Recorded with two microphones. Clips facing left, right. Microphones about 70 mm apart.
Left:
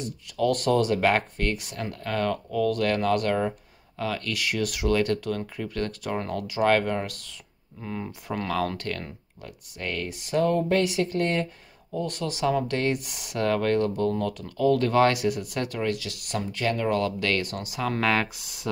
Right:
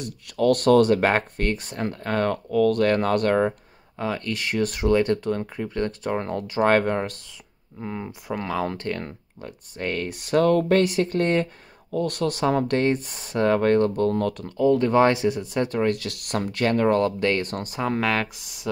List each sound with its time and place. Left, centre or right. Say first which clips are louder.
0.0 s speech: right 4 dB; right
1.0 s speech: right 2 dB; right
4.0 s speech: right 2 dB; right
7.8 s speech: right 2 dB; right
10.8 s speech: right 3 dB; right
11.9 s speech: right 5 dB; right
12.8 s speech: right 4 dB; right
14.4 s speech: right 2 dB; right
15.8 s speech: right 5 dB; right
17.0 s speech: right 4 dB; right
17.7 s speech: right 3 dB; right
18.0 s speech: even; centre